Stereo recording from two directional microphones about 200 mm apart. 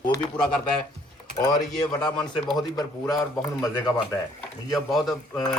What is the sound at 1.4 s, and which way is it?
Speech, 20° left (ahead or behind).